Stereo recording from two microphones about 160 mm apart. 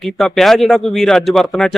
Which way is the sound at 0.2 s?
Centre (ahead or behind).